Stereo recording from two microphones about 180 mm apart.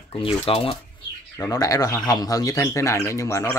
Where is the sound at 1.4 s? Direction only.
20° left (ahead or behind).